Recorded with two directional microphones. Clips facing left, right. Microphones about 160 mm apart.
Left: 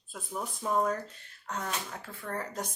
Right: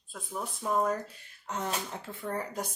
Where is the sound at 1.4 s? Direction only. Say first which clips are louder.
Right 2 dB; 20° right (ahead or behind).